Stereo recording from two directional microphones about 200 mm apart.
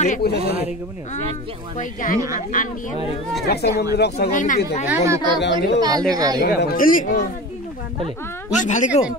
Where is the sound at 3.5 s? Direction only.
55° left (ahead or behind).